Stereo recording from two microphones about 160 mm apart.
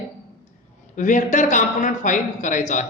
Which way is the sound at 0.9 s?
55° left (ahead or behind).